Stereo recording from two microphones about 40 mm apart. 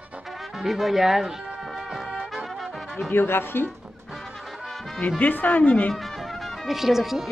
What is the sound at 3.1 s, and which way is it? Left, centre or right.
Speech, left.